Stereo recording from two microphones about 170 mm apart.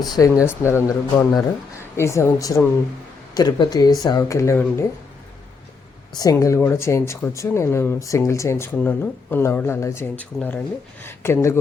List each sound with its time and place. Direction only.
0.0 s speech: 25° left (ahead or behind)
6.1 s speech: 20° left (ahead or behind)